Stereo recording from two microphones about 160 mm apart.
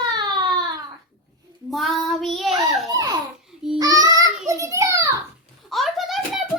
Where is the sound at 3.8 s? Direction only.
25° right (ahead or behind).